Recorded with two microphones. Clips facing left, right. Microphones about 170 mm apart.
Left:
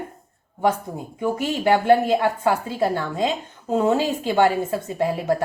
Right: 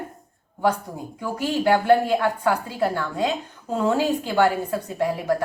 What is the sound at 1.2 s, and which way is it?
A woman's voice, 20° left (ahead or behind).